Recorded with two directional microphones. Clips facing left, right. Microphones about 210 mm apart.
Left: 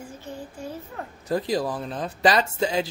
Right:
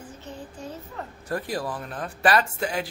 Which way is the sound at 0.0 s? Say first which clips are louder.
Left 2 dB; 10° left (ahead or behind).